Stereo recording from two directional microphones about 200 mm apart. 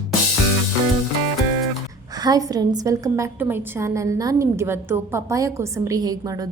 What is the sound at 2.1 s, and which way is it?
A woman's voice, 20° right (ahead or behind).